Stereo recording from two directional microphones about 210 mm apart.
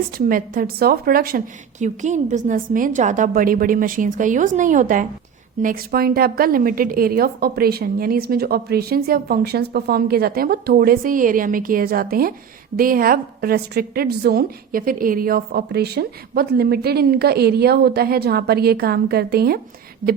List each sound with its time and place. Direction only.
0.3 s a woman's voice: 40° right (ahead or behind)